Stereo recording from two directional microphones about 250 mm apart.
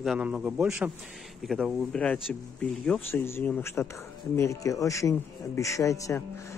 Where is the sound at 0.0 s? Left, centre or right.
Centre.